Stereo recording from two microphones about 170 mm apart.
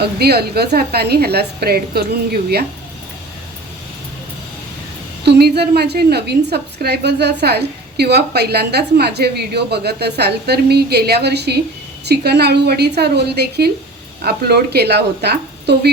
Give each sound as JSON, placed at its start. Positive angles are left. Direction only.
{"t": 0.0, "sound": "a woman's voice", "side_deg": -70}
{"t": 5.2, "sound": "a woman's voice", "side_deg": -75}